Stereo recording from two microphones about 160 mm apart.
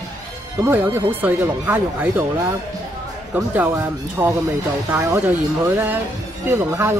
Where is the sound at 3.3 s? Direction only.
10° right (ahead or behind).